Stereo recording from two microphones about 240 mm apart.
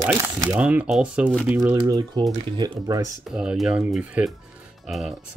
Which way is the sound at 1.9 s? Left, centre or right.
Centre.